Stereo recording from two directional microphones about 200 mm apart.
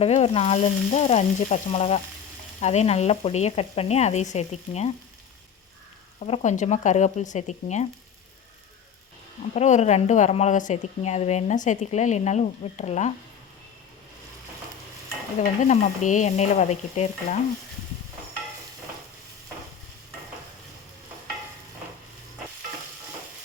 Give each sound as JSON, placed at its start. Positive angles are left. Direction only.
{"t": 0.0, "sound": "a woman's voice", "side_deg": 30}
{"t": 6.1, "sound": "a woman's voice", "side_deg": 35}
{"t": 9.6, "sound": "a woman's voice", "side_deg": 35}
{"t": 15.4, "sound": "a woman's voice", "side_deg": 35}